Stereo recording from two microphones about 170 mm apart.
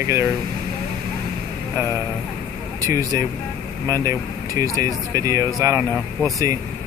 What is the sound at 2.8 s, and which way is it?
Speech, 20° right (ahead or behind).